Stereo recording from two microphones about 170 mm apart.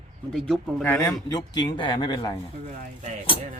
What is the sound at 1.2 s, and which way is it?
Speech, 25° left (ahead or behind).